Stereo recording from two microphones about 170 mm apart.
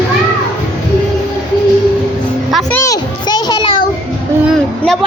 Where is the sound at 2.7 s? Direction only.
20° left (ahead or behind).